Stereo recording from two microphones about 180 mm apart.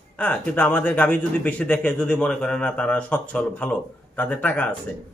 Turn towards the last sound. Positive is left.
turn(degrees=10)  # may be behind; listen again after turning